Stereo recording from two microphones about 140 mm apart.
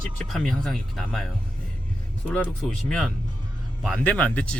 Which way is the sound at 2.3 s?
10° left (ahead or behind).